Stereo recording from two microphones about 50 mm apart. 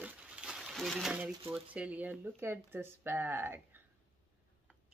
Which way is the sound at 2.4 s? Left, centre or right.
Right.